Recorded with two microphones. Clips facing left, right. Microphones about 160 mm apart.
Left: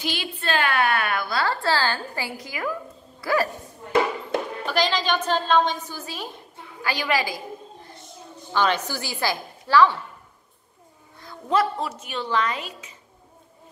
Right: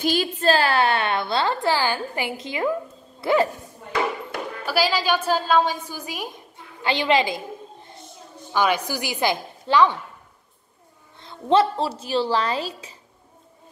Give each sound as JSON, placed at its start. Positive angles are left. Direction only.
{"t": 0.0, "sound": "a woman's voice", "side_deg": -45}
{"t": 4.6, "sound": "a woman's voice", "side_deg": -5}
{"t": 6.8, "sound": "a sound", "side_deg": -25}
{"t": 8.5, "sound": "a woman's voice", "side_deg": -10}
{"t": 11.1, "sound": "a woman's voice", "side_deg": -25}